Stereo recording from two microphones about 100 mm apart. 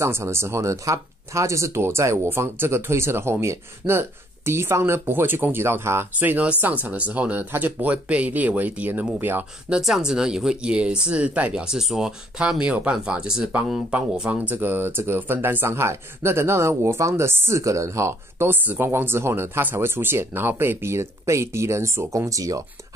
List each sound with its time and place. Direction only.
0.0 s speech: 25° right (ahead or behind)
9.8 s speech: 5° right (ahead or behind); by 22.7 s 35° right (ahead or behind)